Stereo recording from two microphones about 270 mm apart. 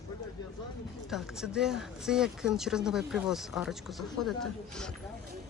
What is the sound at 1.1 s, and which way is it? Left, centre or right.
Speech, centre.